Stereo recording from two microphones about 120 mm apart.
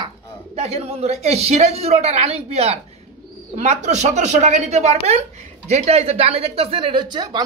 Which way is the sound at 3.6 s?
80° right.